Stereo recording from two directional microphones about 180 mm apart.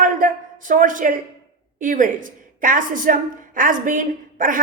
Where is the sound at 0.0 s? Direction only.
45° right (ahead or behind).